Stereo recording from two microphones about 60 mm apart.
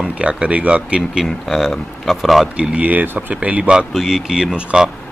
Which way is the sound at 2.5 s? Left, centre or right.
Centre.